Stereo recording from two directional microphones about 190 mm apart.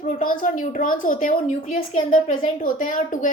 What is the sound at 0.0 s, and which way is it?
A woman's voice, 45° left (ahead or behind).